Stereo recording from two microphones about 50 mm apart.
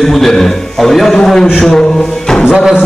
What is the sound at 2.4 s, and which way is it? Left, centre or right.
Music, centre.